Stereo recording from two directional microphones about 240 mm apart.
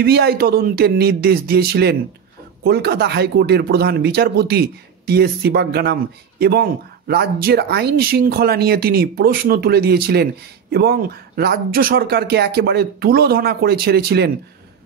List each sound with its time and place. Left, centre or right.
0.0 s speech: right